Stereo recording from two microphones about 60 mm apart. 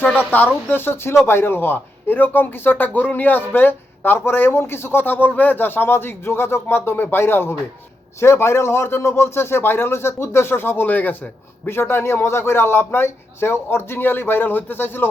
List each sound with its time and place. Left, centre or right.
0.0 s speech: left